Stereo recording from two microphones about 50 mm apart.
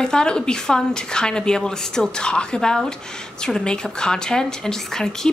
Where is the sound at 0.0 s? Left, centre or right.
Centre.